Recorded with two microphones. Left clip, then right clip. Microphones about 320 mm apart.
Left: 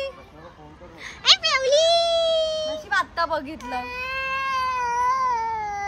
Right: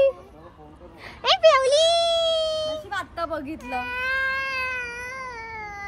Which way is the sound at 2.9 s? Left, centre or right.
Centre.